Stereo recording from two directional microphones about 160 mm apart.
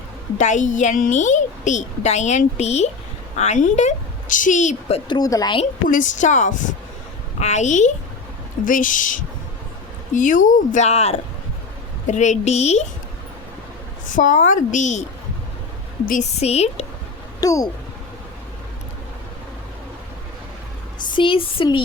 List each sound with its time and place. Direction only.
0.3 s a woman's voice: 50° left (ahead or behind)
5.1 s speech: 25° left (ahead or behind)
5.9 s a woman's voice: 50° left (ahead or behind)
14.1 s a woman's voice: 55° left (ahead or behind)
16.4 s speech: 40° left (ahead or behind)
17.4 s speech: 20° left (ahead or behind)
21.1 s speech: 30° left (ahead or behind)